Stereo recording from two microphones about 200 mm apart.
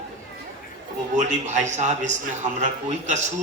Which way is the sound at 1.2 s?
35° right (ahead or behind).